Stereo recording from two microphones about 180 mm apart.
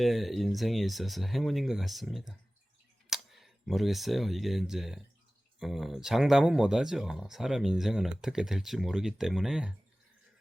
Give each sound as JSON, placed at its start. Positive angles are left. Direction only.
{"t": 0.0, "sound": "speech", "side_deg": 0}